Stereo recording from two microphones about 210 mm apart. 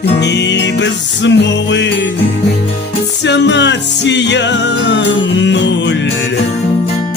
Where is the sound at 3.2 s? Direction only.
55° left (ahead or behind).